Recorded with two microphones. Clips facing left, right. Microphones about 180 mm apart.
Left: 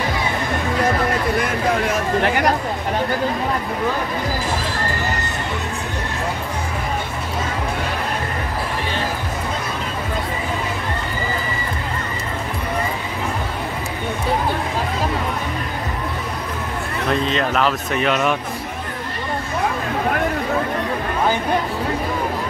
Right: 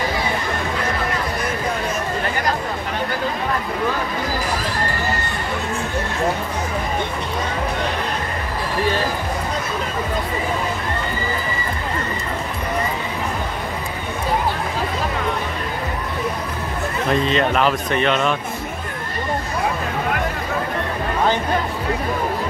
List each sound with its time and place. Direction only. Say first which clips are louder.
17.1 s speech: right 1 dB; centre (ahead or behind)